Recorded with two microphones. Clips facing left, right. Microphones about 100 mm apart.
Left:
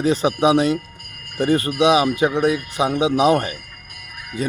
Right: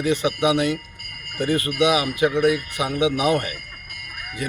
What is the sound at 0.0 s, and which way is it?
Speech, 30° left (ahead or behind).